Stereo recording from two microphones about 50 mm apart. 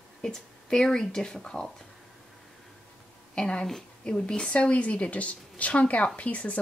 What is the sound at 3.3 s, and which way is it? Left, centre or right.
A woman's voice, centre.